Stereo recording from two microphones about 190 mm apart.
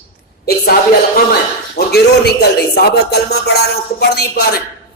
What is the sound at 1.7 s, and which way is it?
Speech, 55° left (ahead or behind).